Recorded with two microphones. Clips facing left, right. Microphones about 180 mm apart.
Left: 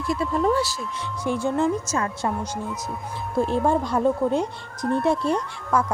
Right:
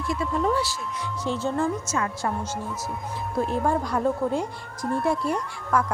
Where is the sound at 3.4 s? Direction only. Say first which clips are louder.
Left 3 dB; 25° left (ahead or behind).